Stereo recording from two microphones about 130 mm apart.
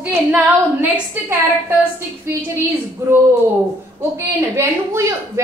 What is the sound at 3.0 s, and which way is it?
A woman's voice, 20° right (ahead or behind).